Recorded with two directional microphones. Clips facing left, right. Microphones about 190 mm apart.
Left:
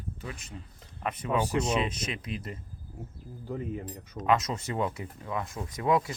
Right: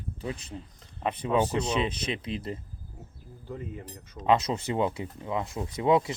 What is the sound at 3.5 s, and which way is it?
Speech, 20° left (ahead or behind).